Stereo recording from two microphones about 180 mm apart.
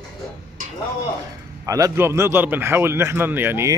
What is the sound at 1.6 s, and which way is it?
Speech, 20° right (ahead or behind).